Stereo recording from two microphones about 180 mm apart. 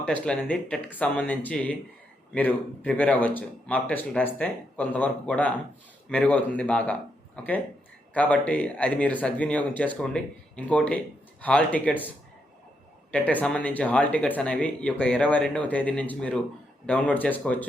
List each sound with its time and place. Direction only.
0.0 s speech: 5° left (ahead or behind)